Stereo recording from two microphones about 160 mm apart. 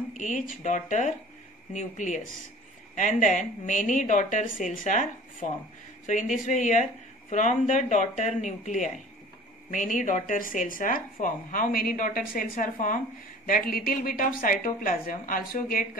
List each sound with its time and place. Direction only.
0.2 s speech: 50° left (ahead or behind)